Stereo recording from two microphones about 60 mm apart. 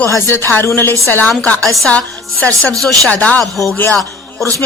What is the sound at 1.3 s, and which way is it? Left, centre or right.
Speech, centre.